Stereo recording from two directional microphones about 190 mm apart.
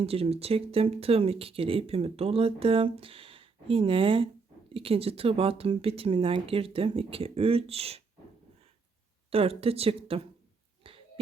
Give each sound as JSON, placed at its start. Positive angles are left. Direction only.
{"t": 0.0, "sound": "speech", "side_deg": -30}
{"t": 9.3, "sound": "speech", "side_deg": -30}
{"t": 10.8, "sound": "a sound", "side_deg": -30}